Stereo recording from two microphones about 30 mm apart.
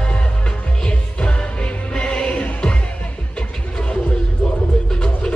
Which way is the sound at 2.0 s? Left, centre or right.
Left.